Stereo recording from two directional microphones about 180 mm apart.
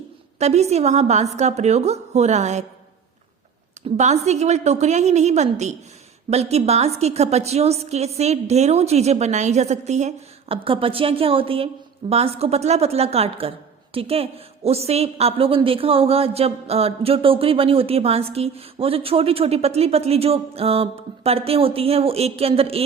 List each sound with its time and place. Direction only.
0.3 s a woman's voice: 35° right (ahead or behind)
3.8 s a woman's voice: 40° right (ahead or behind)